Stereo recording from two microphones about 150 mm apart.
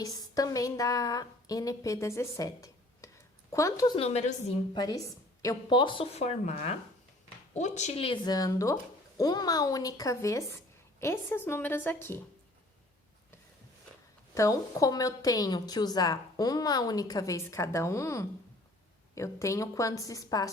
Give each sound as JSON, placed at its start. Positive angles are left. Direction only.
{"t": 0.0, "sound": "a woman's voice", "side_deg": 25}
{"t": 3.9, "sound": "a woman's voice", "side_deg": 45}
{"t": 4.7, "sound": "a woman's voice", "side_deg": 25}
{"t": 14.3, "sound": "a woman's voice", "side_deg": 20}